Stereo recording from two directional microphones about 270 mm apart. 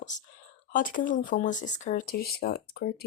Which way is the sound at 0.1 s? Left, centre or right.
Left.